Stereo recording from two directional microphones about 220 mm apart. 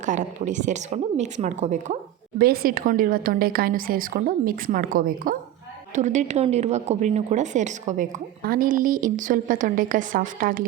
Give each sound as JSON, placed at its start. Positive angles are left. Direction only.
{"t": 0.0, "sound": "speech", "side_deg": -35}
{"t": 2.4, "sound": "speech", "side_deg": -45}